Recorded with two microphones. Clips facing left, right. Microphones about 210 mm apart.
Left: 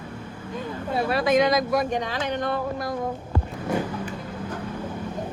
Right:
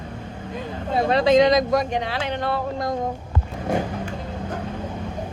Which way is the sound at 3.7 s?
25° right (ahead or behind).